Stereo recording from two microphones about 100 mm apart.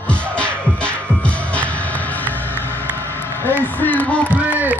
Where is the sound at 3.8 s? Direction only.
15° left (ahead or behind).